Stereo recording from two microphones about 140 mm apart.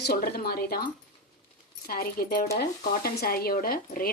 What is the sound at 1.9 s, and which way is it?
A woman's voice, 90° left.